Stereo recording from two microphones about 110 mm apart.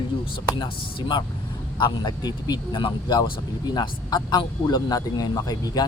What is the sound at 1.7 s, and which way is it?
Speech, 45° left (ahead or behind).